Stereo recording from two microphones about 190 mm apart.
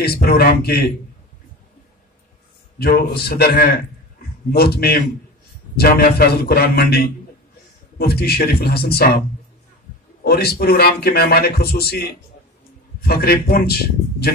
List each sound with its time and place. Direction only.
0.0 s a man's voice: 55° left (ahead or behind)
2.8 s a man's voice: 55° left (ahead or behind)
8.0 s speech: 55° left (ahead or behind)
10.2 s speech: 55° left (ahead or behind)